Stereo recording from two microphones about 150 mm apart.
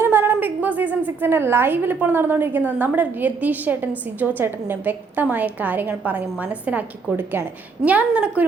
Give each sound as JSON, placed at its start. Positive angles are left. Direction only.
{"t": 0.0, "sound": "a woman's voice", "side_deg": -15}